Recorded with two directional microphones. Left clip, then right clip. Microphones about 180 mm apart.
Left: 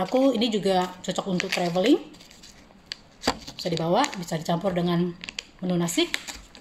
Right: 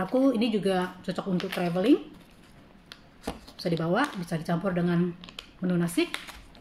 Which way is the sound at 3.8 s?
Centre (ahead or behind).